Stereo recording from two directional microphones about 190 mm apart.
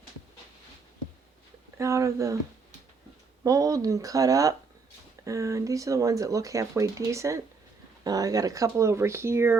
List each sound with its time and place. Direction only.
1.8 s speech: 15° right (ahead or behind)
3.4 s speech: 20° right (ahead or behind)